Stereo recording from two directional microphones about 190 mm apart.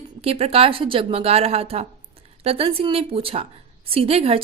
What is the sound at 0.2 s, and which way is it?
A woman's voice, 30° right (ahead or behind).